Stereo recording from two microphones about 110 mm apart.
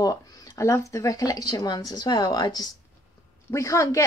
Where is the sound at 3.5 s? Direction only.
25° left (ahead or behind).